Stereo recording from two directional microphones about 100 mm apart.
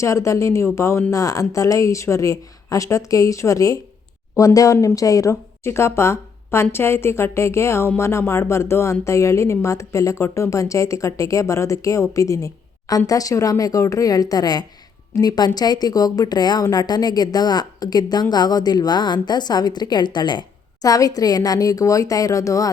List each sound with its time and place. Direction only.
0.0 s a woman's voice: 30° left (ahead or behind)